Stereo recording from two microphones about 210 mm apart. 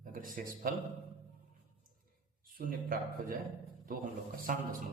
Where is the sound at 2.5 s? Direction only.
40° right (ahead or behind).